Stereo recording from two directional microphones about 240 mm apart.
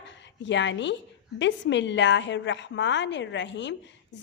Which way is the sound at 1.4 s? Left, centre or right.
Left.